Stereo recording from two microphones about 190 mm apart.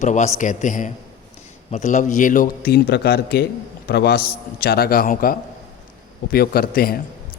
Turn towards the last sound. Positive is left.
turn(degrees=50)  # may be behind; listen again after turning